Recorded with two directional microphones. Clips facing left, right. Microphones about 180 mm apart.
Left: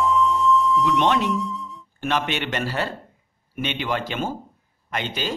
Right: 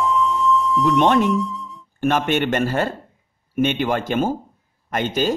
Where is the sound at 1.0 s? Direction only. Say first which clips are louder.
Right 5 dB; 50° right (ahead or behind).